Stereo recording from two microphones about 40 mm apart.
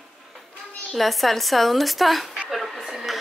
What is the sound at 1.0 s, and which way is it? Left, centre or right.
A woman's voice, centre.